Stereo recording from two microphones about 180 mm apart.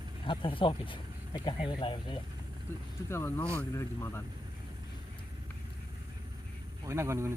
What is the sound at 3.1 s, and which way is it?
Speech, 10° left (ahead or behind).